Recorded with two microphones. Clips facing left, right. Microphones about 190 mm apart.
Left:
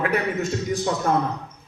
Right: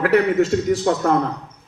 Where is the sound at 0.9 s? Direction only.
55° right (ahead or behind).